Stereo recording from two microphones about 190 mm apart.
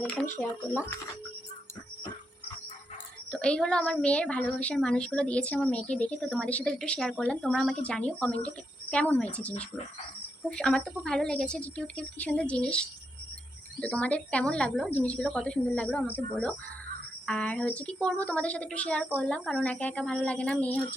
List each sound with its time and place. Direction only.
0.4 s a woman's voice: 5° left (ahead or behind)
3.3 s a woman's voice: 5° left (ahead or behind)